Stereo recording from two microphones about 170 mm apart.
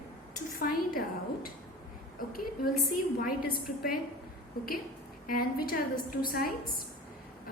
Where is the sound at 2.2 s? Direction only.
60° left (ahead or behind).